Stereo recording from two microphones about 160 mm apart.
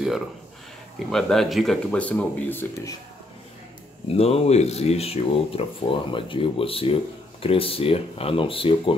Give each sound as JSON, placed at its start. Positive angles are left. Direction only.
{"t": 0.9, "sound": "speech", "side_deg": 0}
{"t": 4.1, "sound": "speech", "side_deg": 40}